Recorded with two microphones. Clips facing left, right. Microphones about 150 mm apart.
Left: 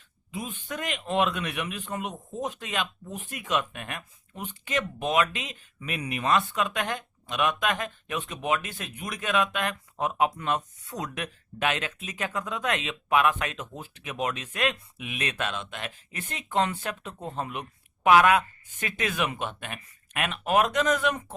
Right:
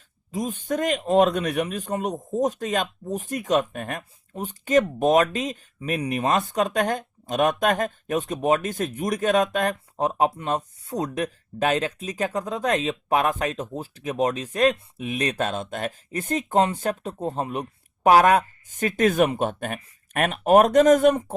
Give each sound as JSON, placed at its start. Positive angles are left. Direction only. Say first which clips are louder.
{"t": 0.3, "sound": "a man's voice", "louder": "right 9 dB", "side_deg": -40}